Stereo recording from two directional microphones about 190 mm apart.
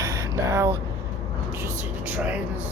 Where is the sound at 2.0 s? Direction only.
10° right (ahead or behind).